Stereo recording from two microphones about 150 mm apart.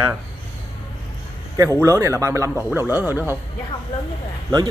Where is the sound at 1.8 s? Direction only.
20° right (ahead or behind).